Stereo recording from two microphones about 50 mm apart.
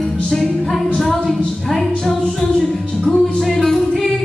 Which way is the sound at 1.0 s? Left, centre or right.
Centre.